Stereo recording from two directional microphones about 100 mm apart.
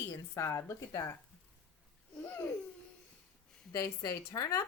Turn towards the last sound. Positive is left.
turn(degrees=30)  # may be behind; listen again after turning